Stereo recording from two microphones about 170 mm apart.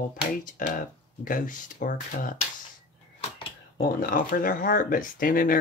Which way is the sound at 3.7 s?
55° left (ahead or behind).